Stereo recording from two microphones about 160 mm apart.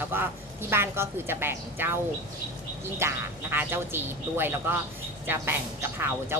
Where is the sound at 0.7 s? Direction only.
15° right (ahead or behind).